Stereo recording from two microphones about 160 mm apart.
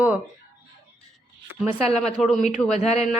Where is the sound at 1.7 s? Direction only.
40° left (ahead or behind).